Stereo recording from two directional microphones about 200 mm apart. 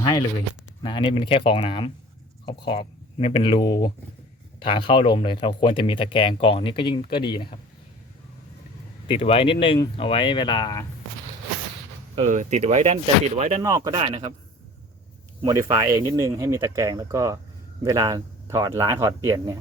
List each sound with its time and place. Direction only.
0.0 s speech: 20° left (ahead or behind)
9.0 s speech: 25° left (ahead or behind)
12.1 s speech: 35° right (ahead or behind)
13.6 s speech: 15° right (ahead or behind)
14.0 s a man's voice: 30° right (ahead or behind)
15.4 s speech: 15° right (ahead or behind)